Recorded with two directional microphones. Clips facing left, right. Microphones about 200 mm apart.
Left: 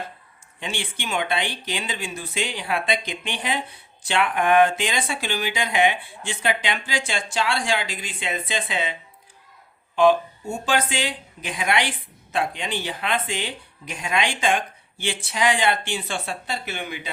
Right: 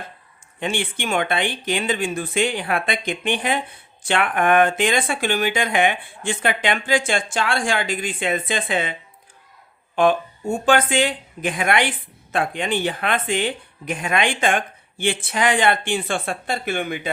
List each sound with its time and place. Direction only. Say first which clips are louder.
0.6 s speech: right 6 dB; 50° right (ahead or behind)